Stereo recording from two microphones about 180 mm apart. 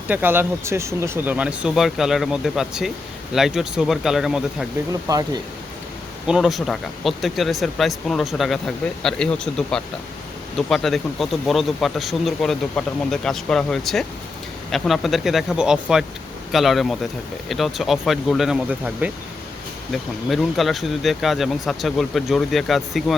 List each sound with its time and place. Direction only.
0.1 s speech: 10° right (ahead or behind)
5.0 s speech: 20° right (ahead or behind)
6.2 s speech: 5° right (ahead or behind)